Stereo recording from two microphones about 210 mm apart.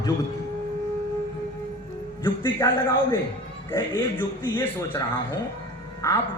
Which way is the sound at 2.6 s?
15° left (ahead or behind).